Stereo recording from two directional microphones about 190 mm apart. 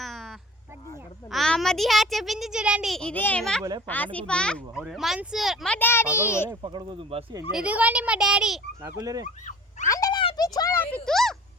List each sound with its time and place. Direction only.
0.0 s a sound: centre (ahead or behind)
1.3 s a child's voice: centre (ahead or behind)
3.6 s speech: 20° right (ahead or behind)
3.8 s a child's voice: 10° left (ahead or behind)
6.6 s speech: 25° right (ahead or behind)
7.5 s a child's voice: 5° right (ahead or behind)
8.8 s speech: 20° right (ahead or behind)
9.2 s fowl: 40° left (ahead or behind)
9.8 s a sound: 20° left (ahead or behind); by 11.3 s centre (ahead or behind)